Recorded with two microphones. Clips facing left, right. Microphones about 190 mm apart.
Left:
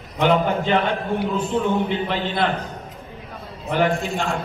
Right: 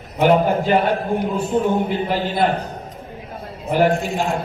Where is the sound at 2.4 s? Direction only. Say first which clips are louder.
Right 4 dB; 40° right (ahead or behind).